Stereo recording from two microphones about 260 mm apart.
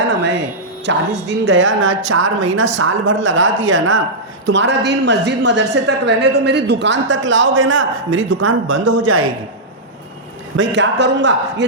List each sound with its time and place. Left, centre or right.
0.9 s a woman's voice: right
10.6 s a woman's voice: right